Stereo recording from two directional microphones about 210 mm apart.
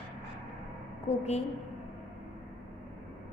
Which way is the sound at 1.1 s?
30° left (ahead or behind).